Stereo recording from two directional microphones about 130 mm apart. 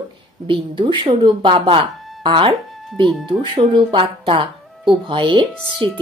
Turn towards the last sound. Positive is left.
turn(degrees=-40)  # may be behind; listen again after turning